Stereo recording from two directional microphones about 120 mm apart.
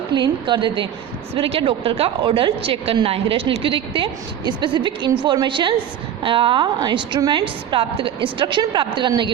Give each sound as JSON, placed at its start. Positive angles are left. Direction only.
{"t": 0.1, "sound": "a woman's voice", "side_deg": -40}